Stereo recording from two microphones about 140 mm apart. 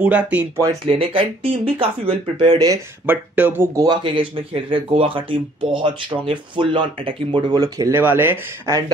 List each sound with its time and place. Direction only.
0.0 s speech: 10° right (ahead or behind)
0.8 s speech: 40° right (ahead or behind)
2.5 s speech: 25° right (ahead or behind)
3.1 s speech: 15° right (ahead or behind)
3.8 s speech: 35° right (ahead or behind)
8.0 s speech: 15° right (ahead or behind)